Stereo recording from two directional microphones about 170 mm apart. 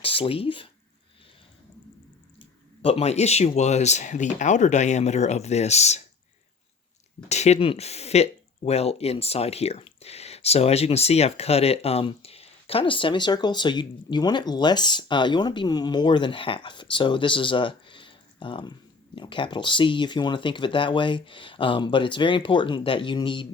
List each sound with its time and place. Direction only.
0.0 s speech: 35° left (ahead or behind)
2.8 s speech: 40° left (ahead or behind)
7.3 s speech: 40° left (ahead or behind)